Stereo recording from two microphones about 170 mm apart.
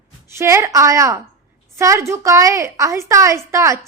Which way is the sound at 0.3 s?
15° right (ahead or behind).